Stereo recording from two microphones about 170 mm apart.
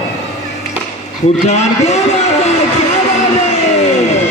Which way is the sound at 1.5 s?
40° left (ahead or behind).